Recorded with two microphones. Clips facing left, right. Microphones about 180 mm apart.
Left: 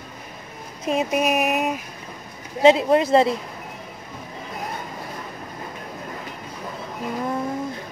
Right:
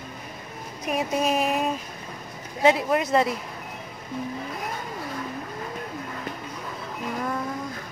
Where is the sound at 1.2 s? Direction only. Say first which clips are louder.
Left 2 dB; 15° left (ahead or behind).